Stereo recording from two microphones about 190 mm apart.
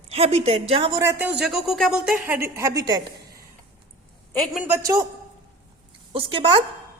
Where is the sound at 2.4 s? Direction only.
15° right (ahead or behind).